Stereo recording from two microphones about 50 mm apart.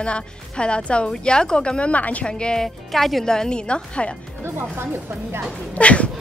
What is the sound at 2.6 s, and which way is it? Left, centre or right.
A woman's voice, centre.